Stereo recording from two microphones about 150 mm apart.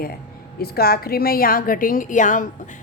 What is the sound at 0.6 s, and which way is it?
A woman's voice, 90° left.